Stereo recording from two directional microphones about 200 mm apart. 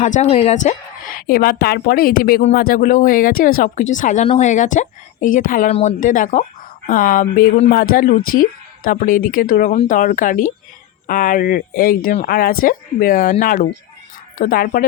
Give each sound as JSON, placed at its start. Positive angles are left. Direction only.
{"t": 0.0, "sound": "a woman's voice", "side_deg": 35}
{"t": 14.3, "sound": "a woman's voice", "side_deg": 45}